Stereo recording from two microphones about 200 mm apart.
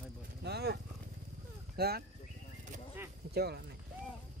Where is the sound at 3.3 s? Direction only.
55° right (ahead or behind).